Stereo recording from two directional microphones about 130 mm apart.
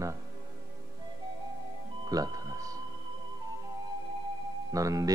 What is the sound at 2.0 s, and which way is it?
Speech, 30° right (ahead or behind).